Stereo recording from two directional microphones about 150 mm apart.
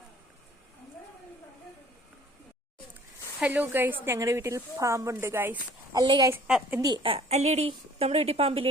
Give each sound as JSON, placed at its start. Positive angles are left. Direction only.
{"t": 3.4, "sound": "a woman's voice", "side_deg": -10}
{"t": 6.3, "sound": "a woman's voice", "side_deg": -15}
{"t": 6.8, "sound": "a woman's voice", "side_deg": -35}